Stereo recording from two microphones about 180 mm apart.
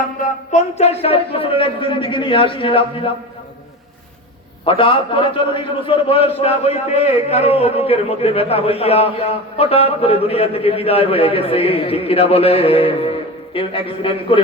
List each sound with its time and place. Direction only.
0.2 s a man's voice: 40° left (ahead or behind)
4.6 s a man's voice: 30° left (ahead or behind)